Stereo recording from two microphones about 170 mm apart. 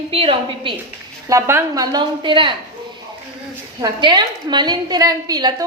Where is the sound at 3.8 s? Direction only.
25° right (ahead or behind).